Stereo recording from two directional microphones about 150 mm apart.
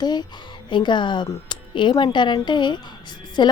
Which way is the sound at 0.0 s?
30° left (ahead or behind).